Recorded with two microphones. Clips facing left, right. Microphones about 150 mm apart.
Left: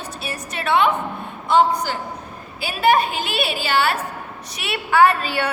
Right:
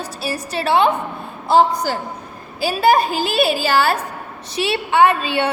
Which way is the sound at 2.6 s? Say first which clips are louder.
Right 3 dB; 35° right (ahead or behind).